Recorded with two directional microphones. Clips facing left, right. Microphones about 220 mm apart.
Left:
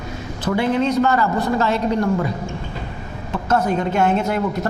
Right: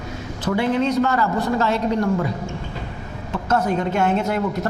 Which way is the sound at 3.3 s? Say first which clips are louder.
Left 1 dB; 25° left (ahead or behind).